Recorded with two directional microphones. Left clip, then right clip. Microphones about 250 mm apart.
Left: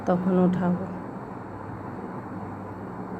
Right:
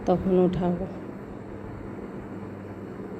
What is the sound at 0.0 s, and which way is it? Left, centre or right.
Speech, centre.